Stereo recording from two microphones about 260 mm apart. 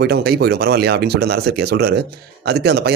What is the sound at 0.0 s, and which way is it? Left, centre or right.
Speech, right.